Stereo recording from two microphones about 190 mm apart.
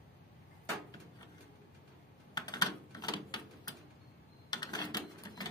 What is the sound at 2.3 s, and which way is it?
Typewriter, 20° left (ahead or behind).